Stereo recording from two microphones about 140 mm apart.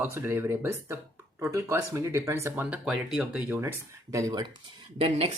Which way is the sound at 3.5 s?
20° right (ahead or behind).